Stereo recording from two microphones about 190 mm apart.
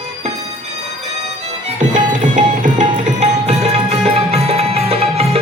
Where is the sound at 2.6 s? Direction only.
35° right (ahead or behind).